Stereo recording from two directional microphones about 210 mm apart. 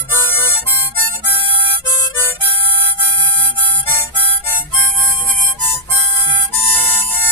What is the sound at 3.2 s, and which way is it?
Music, 20° right (ahead or behind).